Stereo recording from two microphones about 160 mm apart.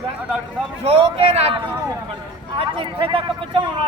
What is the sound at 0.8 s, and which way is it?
Speech, 35° right (ahead or behind).